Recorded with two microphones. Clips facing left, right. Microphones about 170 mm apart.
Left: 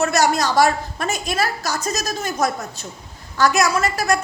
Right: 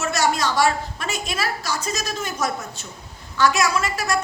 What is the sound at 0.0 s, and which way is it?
Speech, 45° left (ahead or behind).